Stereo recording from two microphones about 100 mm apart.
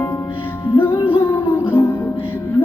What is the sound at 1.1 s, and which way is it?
Music, 20° left (ahead or behind).